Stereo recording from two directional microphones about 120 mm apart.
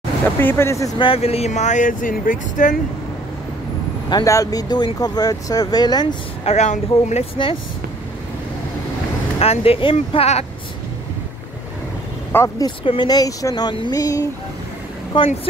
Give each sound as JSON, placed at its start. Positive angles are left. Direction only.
{"t": 0.4, "sound": "speech", "side_deg": 20}
{"t": 0.9, "sound": "speech", "side_deg": 50}
{"t": 4.1, "sound": "speech", "side_deg": 30}
{"t": 6.4, "sound": "speech", "side_deg": 80}
{"t": 9.4, "sound": "speech", "side_deg": 55}
{"t": 10.1, "sound": "speech", "side_deg": 60}
{"t": 12.3, "sound": "speech", "side_deg": 20}
{"t": 12.6, "sound": "speech", "side_deg": 40}
{"t": 15.1, "sound": "speech", "side_deg": 45}